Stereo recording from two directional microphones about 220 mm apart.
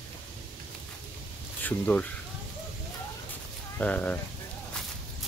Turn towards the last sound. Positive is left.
turn(degrees=5)  # may be behind; listen again after turning